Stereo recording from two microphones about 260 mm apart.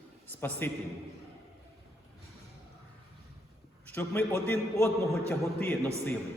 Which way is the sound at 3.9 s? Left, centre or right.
Centre.